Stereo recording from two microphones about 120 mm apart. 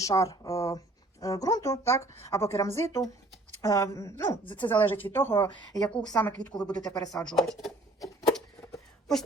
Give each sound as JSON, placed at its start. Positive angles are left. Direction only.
{"t": 0.0, "sound": "a woman's voice", "side_deg": 25}
{"t": 5.7, "sound": "a woman's voice", "side_deg": 5}
{"t": 8.3, "sound": "a sound", "side_deg": 5}